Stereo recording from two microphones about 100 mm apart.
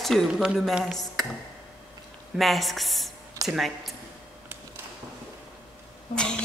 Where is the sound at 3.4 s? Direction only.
35° right (ahead or behind).